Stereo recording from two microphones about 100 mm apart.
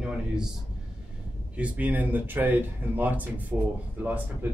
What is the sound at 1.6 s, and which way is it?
Speech, 15° right (ahead or behind).